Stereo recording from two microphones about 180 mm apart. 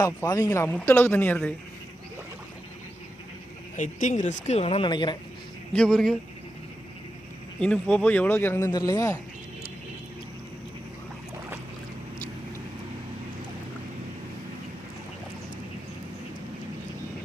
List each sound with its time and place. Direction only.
0.0 s a man's voice: 20° left (ahead or behind)
3.8 s speech: 45° left (ahead or behind); by 5.1 s 25° left (ahead or behind)
5.7 s speech: 5° left (ahead or behind)
7.6 s a man's voice: 5° left (ahead or behind)